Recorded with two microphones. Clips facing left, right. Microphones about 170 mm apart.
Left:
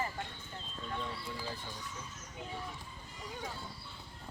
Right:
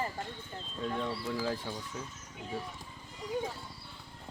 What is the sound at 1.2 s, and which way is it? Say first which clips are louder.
Speech: right 8 dB; 90° right.